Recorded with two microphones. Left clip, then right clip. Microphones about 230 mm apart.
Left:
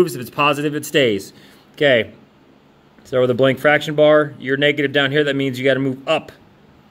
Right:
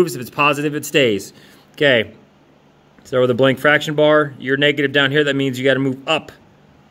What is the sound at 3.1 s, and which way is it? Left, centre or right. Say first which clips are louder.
Speech: right 1 dB; centre.